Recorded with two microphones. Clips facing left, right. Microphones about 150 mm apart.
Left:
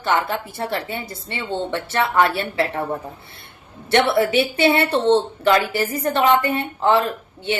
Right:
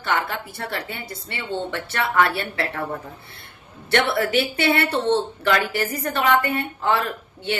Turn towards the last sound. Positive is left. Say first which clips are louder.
# left 2 dB
turn(degrees=20)  # may be behind; listen again after turning